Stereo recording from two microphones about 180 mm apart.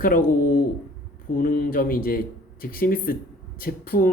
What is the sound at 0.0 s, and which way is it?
Speech, 50° left (ahead or behind).